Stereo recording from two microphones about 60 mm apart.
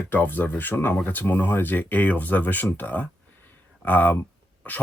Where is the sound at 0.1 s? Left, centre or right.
Left.